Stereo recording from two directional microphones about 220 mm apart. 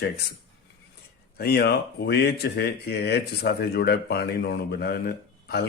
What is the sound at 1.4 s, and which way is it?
Speech, 45° left (ahead or behind).